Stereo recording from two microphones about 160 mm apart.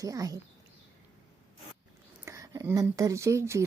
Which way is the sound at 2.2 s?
20° right (ahead or behind).